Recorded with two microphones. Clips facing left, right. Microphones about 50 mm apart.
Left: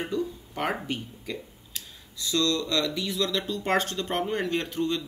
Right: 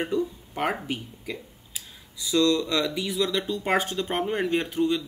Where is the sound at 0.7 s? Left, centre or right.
Centre.